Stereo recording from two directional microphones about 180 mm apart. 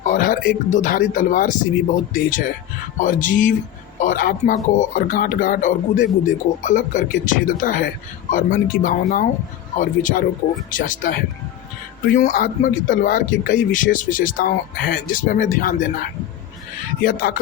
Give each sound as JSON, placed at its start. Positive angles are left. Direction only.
{"t": 0.0, "sound": "speech", "side_deg": 50}
{"t": 3.0, "sound": "speech", "side_deg": 45}
{"t": 17.0, "sound": "speech", "side_deg": 55}